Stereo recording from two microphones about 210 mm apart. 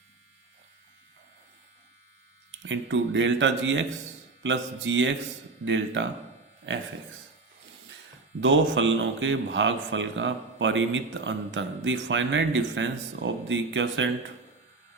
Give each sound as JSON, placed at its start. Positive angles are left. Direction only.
{"t": 2.5, "sound": "a man's voice", "side_deg": -60}
{"t": 8.4, "sound": "a man's voice", "side_deg": -60}